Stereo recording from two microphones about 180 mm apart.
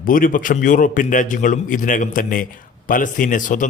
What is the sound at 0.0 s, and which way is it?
A man's voice, 50° left (ahead or behind).